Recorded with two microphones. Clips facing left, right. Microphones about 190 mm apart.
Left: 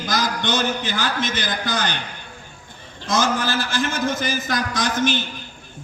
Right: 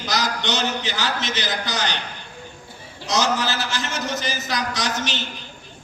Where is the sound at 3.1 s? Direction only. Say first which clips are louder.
Left 1 dB; 50° left (ahead or behind).